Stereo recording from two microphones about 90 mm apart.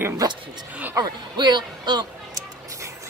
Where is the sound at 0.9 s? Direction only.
50° right (ahead or behind).